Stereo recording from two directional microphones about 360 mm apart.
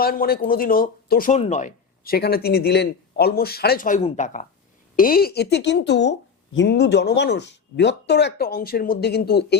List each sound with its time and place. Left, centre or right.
0.0 s a woman's voice: left